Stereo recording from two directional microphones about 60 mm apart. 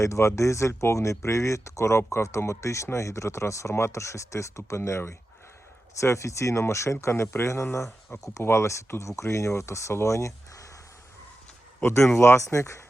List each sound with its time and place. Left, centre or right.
0.0 s speech: left
8.2 s speech: left
8.4 s speech: left
11.8 s speech: left
12.1 s speech: left